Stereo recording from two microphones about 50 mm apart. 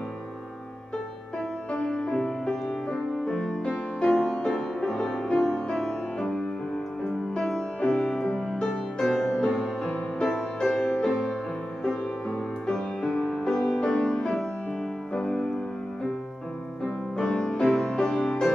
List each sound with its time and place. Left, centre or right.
1.7 s music: centre
7.8 s music: centre
9.0 s music: centre
9.8 s music: left
10.2 s music: centre
17.2 s music: centre